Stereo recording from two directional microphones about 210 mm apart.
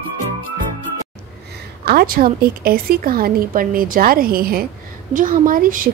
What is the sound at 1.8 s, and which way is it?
A woman's voice, 45° right (ahead or behind).